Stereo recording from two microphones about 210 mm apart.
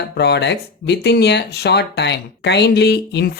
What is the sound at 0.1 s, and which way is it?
Speech, 50° left (ahead or behind).